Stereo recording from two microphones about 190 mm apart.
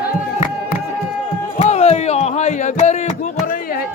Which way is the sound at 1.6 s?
35° left (ahead or behind).